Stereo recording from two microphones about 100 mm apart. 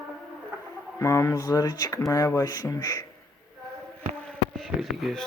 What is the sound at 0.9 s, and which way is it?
Speech, 30° left (ahead or behind).